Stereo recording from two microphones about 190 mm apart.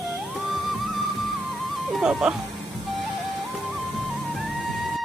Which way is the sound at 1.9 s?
Centre (ahead or behind).